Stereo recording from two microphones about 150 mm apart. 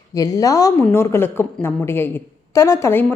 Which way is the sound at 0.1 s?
25° left (ahead or behind).